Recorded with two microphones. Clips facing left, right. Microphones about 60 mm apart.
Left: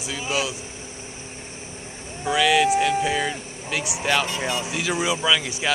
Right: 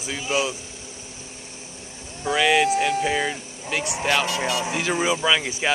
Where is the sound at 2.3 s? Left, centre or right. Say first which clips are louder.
Left 1 dB; centre.